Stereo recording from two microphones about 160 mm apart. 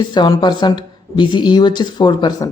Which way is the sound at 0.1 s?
25° left (ahead or behind).